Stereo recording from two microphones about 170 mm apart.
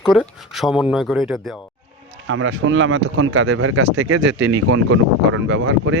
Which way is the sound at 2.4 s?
90° right.